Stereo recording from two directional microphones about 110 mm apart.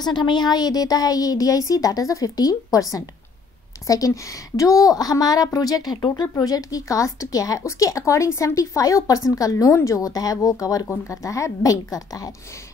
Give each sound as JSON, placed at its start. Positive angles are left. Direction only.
{"t": 0.0, "sound": "a woman's voice", "side_deg": 40}